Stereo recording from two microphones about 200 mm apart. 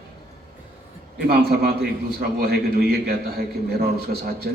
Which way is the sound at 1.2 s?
50° right (ahead or behind).